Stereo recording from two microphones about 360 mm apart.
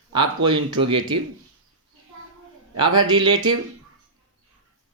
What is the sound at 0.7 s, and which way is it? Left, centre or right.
Speech, right.